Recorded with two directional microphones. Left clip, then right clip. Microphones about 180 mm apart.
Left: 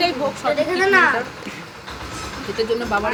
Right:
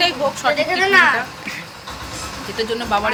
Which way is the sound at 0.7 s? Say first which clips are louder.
Right 2 dB; 40° left (ahead or behind).